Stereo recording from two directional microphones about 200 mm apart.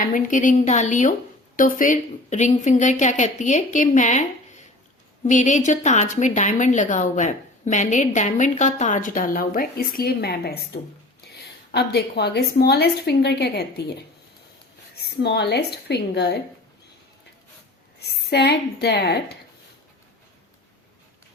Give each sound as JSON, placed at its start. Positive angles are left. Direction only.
{"t": 0.0, "sound": "a woman's voice", "side_deg": 40}
{"t": 11.7, "sound": "a woman's voice", "side_deg": 55}
{"t": 14.9, "sound": "a woman's voice", "side_deg": 55}
{"t": 18.0, "sound": "a woman's voice", "side_deg": 55}